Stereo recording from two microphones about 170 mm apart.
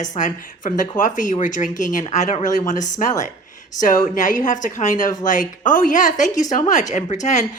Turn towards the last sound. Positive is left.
turn(degrees=45)  # may be behind; listen again after turning